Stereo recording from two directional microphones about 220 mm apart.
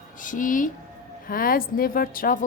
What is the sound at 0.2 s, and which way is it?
A woman's voice, 35° left (ahead or behind).